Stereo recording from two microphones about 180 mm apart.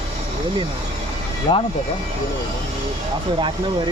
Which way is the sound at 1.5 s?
35° left (ahead or behind).